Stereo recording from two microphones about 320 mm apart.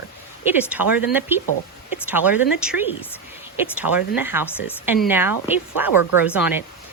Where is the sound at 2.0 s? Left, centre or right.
Centre.